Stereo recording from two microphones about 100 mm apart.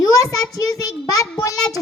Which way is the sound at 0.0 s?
35° left (ahead or behind).